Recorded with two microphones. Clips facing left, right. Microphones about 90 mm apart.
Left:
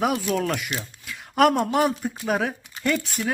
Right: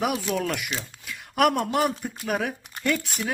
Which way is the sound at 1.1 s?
Centre (ahead or behind).